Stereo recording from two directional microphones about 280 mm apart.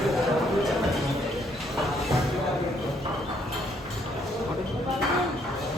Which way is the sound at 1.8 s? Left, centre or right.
Centre.